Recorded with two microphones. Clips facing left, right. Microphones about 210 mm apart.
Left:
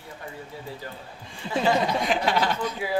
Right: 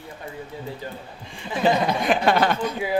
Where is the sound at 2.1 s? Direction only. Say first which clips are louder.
Right 4 dB; 55° right (ahead or behind).